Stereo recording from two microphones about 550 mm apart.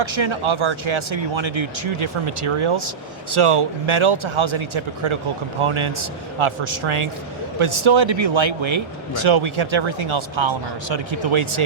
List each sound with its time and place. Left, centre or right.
0.0 s speech: right